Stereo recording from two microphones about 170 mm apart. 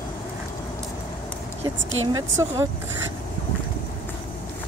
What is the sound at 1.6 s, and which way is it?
Speech, 25° right (ahead or behind).